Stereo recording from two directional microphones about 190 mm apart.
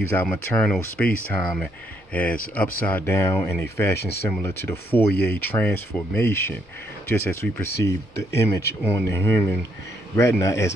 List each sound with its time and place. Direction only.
0.1 s speech: 10° left (ahead or behind)